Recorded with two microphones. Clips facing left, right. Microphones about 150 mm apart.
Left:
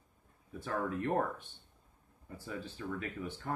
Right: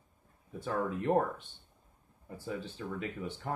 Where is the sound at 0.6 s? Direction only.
20° right (ahead or behind).